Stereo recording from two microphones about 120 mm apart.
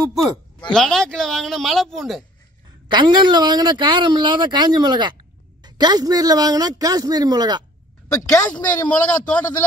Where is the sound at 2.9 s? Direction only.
40° right (ahead or behind).